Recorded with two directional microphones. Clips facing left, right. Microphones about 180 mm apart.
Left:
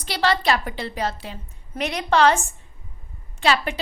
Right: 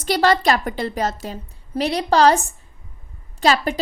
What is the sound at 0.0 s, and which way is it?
A woman's voice, 45° right (ahead or behind).